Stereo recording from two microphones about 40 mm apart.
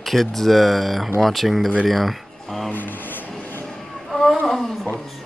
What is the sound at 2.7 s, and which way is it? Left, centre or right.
Speech, left.